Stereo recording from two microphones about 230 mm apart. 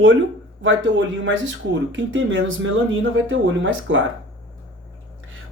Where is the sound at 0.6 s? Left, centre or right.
Right.